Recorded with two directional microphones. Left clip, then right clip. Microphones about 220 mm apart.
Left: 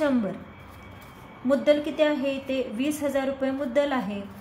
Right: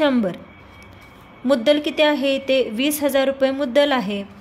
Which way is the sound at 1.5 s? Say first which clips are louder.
Right 5 dB; 40° right (ahead or behind).